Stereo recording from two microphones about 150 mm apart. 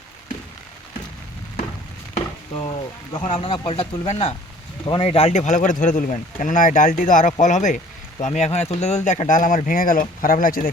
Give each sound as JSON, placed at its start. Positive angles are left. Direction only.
{"t": 2.6, "sound": "speech", "side_deg": 30}